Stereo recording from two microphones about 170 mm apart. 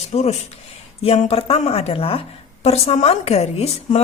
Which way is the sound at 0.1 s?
40° left (ahead or behind).